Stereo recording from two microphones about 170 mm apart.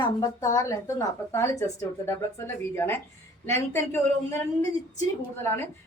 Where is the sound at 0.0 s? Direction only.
20° left (ahead or behind).